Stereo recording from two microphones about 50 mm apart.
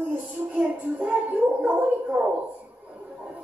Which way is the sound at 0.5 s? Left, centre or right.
Right.